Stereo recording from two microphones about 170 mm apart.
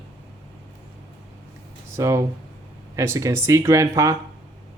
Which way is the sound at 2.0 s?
15° right (ahead or behind).